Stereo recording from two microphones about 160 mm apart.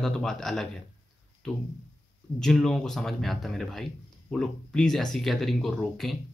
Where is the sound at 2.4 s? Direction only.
5° left (ahead or behind).